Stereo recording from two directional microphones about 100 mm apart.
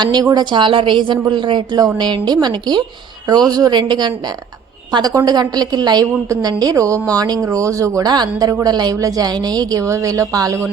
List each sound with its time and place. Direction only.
0.0 s speech: 45° right (ahead or behind)
6.2 s a woman's voice: 30° right (ahead or behind)